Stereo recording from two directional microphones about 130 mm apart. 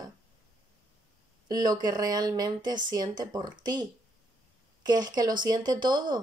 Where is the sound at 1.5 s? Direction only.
30° right (ahead or behind).